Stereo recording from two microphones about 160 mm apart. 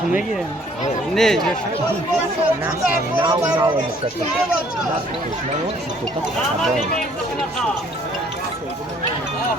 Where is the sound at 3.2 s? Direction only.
25° right (ahead or behind).